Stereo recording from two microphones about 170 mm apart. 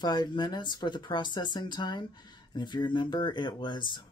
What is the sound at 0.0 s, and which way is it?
Speech, 25° left (ahead or behind).